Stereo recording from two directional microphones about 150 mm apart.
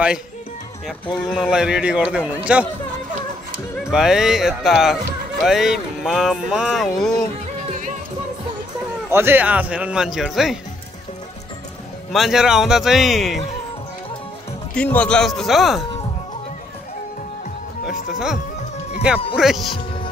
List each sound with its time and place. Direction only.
1.3 s speech: 5° right (ahead or behind)
3.9 s speech: 5° right (ahead or behind)
9.1 s speech: 15° right (ahead or behind)
12.1 s speech: centre (ahead or behind)
14.7 s speech: 10° left (ahead or behind)
17.8 s speech: 60° left (ahead or behind)
19.3 s speech: centre (ahead or behind)